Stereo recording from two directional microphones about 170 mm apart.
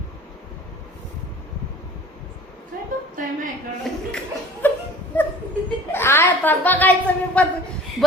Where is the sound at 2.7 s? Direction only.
55° right (ahead or behind).